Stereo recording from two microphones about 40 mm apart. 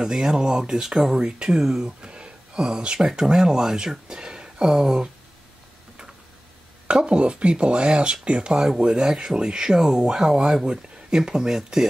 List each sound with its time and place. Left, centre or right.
0.0 s speech: centre
6.9 s speech: right